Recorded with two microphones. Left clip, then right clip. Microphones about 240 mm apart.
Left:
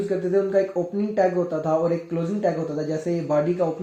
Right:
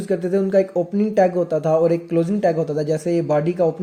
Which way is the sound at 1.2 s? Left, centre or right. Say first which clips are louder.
Right 3 dB; right.